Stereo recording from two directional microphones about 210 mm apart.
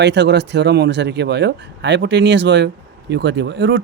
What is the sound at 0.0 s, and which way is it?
A man's voice, 55° right (ahead or behind).